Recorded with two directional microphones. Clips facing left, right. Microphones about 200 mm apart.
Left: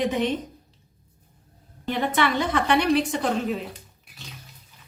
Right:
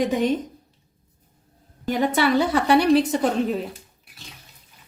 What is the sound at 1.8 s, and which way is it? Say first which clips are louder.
Speech: right 3 dB; 40° right (ahead or behind).